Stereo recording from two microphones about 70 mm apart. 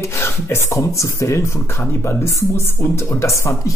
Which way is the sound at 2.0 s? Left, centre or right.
Left.